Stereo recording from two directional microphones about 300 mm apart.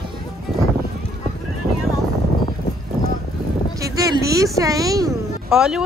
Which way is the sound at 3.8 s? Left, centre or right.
Centre.